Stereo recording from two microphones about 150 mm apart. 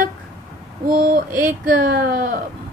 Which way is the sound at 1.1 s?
65° right (ahead or behind).